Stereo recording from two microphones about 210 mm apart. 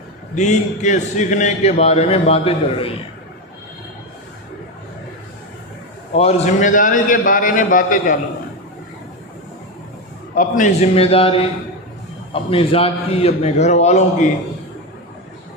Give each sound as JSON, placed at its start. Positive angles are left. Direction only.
{"t": 0.3, "sound": "a man's voice", "side_deg": 35}
{"t": 6.1, "sound": "a man's voice", "side_deg": 30}
{"t": 10.3, "sound": "a man's voice", "side_deg": 40}